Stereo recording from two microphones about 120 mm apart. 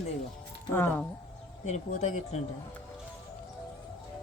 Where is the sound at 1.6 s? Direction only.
70° left (ahead or behind).